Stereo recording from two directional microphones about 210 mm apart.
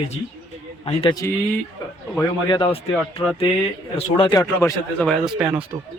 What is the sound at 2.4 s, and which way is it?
Speech, 20° left (ahead or behind).